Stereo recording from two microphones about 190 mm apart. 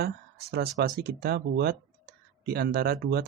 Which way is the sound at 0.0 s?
55° right (ahead or behind).